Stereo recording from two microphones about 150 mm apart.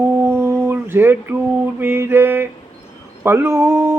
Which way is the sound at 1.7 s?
15° right (ahead or behind).